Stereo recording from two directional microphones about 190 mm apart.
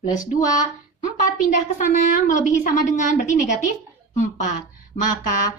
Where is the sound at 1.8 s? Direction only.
40° left (ahead or behind).